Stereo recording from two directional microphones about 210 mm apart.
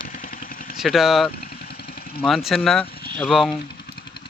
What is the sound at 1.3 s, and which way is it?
Vehicle, 45° left (ahead or behind).